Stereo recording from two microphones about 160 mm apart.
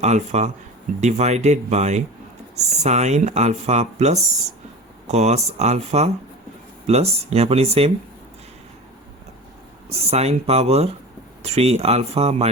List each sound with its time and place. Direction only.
0.0 s speech: 45° right (ahead or behind)
9.9 s speech: 40° right (ahead or behind)